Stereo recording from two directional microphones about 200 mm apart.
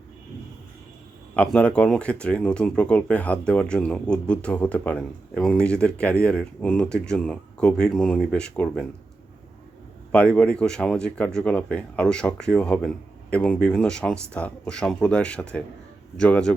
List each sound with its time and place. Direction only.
1.4 s speech: 5° left (ahead or behind)
10.1 s speech: 5° left (ahead or behind)